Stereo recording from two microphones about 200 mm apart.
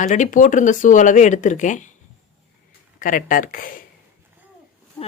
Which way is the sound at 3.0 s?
40° left (ahead or behind).